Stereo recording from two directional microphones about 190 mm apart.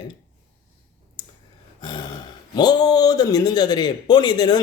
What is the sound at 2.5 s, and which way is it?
Speech, 20° left (ahead or behind).